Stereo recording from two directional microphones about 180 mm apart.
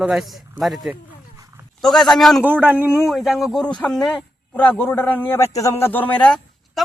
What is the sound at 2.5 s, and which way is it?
A man's voice, 10° right (ahead or behind).